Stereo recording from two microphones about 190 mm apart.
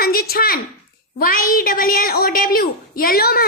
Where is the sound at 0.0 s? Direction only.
50° left (ahead or behind).